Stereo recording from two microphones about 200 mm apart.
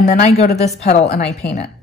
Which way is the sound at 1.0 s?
50° left (ahead or behind).